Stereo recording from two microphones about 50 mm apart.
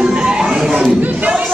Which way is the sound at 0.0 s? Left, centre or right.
Centre.